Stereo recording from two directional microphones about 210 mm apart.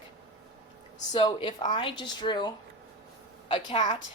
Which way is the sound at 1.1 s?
20° left (ahead or behind).